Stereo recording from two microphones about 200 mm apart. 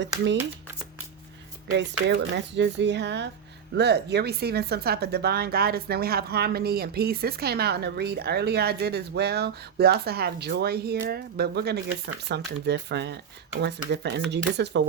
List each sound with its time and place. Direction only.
1.7 s speech: 60° right (ahead or behind)